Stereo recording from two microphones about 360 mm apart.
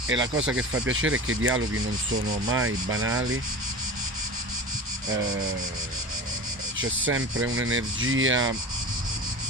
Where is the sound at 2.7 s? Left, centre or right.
Right.